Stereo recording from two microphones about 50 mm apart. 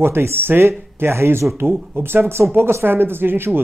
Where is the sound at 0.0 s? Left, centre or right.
Right.